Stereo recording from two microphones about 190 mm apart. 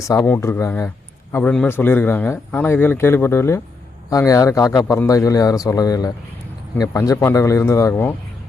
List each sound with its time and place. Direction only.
0.0 s a man's voice: 15° left (ahead or behind)